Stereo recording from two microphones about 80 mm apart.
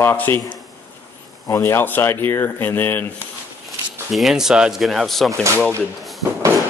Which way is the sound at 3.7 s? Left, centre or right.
Centre.